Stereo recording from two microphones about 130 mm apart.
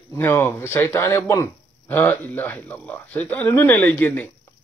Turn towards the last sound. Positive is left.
turn(degrees=15)  # may be behind; listen again after turning